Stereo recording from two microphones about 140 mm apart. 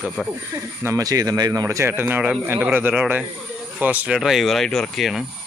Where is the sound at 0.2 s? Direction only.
5° left (ahead or behind).